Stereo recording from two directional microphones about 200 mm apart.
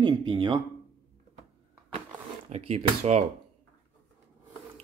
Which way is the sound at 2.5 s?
35° right (ahead or behind).